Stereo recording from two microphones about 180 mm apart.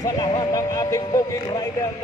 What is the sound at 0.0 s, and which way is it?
Speech, 20° left (ahead or behind).